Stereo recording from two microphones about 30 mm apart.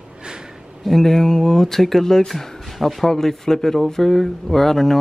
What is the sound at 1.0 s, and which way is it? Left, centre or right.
Speech, centre.